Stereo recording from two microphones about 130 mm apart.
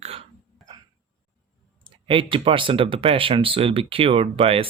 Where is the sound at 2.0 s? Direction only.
40° right (ahead or behind).